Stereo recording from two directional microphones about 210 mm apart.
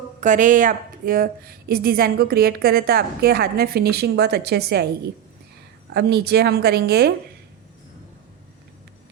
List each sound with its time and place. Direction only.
0.2 s a woman's voice: 35° right (ahead or behind)
5.9 s a woman's voice: 50° right (ahead or behind)